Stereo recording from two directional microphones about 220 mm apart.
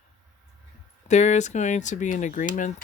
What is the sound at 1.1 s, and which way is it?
Speech, 30° left (ahead or behind).